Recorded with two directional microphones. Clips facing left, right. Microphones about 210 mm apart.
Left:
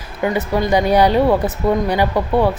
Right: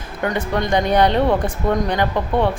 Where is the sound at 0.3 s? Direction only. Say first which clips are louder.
Left 3 dB; 5° left (ahead or behind).